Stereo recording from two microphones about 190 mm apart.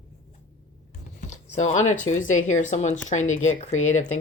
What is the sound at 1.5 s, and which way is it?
Speech, 35° left (ahead or behind).